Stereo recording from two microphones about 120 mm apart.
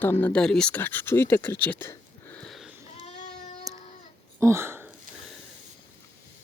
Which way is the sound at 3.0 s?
75° left (ahead or behind).